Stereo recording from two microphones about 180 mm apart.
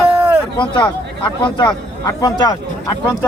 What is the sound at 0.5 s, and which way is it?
Speech, 25° left (ahead or behind).